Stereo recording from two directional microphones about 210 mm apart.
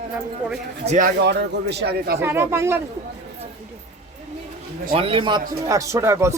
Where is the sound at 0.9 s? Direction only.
40° right (ahead or behind).